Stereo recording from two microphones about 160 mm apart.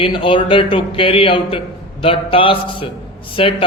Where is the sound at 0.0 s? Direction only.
35° left (ahead or behind).